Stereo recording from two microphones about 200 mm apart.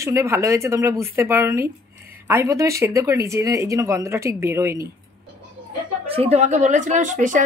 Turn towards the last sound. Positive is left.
turn(degrees=-40)  # may be behind; listen again after turning